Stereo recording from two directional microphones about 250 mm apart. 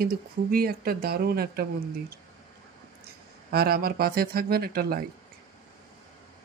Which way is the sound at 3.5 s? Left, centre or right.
Right.